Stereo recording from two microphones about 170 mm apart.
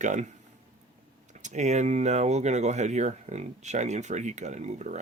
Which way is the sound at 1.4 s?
45° right (ahead or behind).